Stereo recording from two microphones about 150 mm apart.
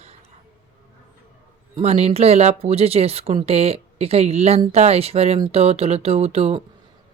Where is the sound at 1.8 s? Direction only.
45° right (ahead or behind).